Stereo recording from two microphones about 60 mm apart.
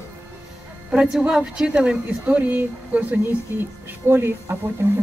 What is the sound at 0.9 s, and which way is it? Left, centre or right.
Speech, centre.